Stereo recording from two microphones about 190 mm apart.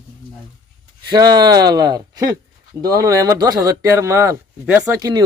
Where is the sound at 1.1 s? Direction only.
20° right (ahead or behind).